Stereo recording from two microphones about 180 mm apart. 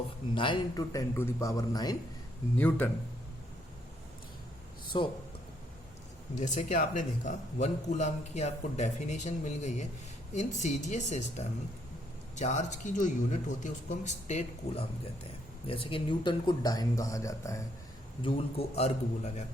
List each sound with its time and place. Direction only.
0.3 s a man's voice: 25° left (ahead or behind)
2.6 s speech: 10° left (ahead or behind)
4.9 s a man's voice: 25° left (ahead or behind)
6.3 s speech: 40° left (ahead or behind); by 17.6 s 20° left (ahead or behind)
18.2 s speech: 30° left (ahead or behind)